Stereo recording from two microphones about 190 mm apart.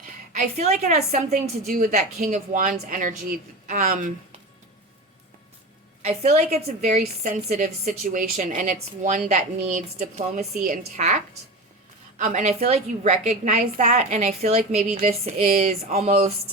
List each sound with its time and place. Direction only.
0.0 s a woman's voice: 40° right (ahead or behind)
6.0 s a woman's voice: 35° right (ahead or behind)
15.4 s a woman's voice: 35° right (ahead or behind)